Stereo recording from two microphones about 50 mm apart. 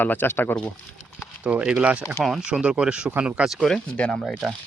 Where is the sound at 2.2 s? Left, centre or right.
Centre.